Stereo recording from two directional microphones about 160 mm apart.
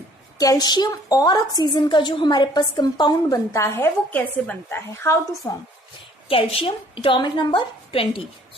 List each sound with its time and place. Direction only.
0.3 s a woman's voice: 25° left (ahead or behind)
6.2 s a woman's voice: 35° left (ahead or behind)